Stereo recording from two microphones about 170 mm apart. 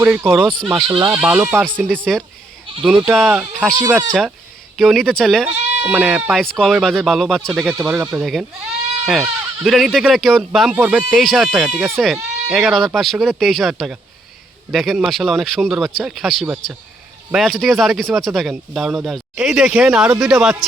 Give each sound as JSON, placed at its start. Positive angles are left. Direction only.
{"t": 0.0, "sound": "speech", "side_deg": -10}
{"t": 0.7, "sound": "speech", "side_deg": -20}
{"t": 1.9, "sound": "speech", "side_deg": 5}
{"t": 9.6, "sound": "speech", "side_deg": 0}